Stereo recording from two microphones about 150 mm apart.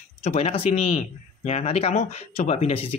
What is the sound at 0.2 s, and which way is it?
Speech, 45° left (ahead or behind).